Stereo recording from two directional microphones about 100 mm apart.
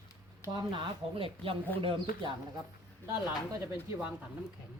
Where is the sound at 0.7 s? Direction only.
60° right (ahead or behind).